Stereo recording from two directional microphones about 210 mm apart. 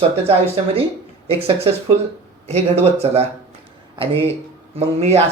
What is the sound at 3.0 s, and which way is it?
Speech, 30° right (ahead or behind).